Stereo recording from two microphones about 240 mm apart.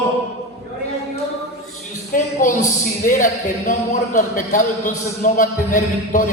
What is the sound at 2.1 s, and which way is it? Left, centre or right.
A woman's voice, left.